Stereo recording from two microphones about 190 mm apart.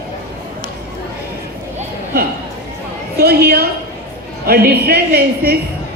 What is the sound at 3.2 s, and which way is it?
A woman's voice, 55° right (ahead or behind).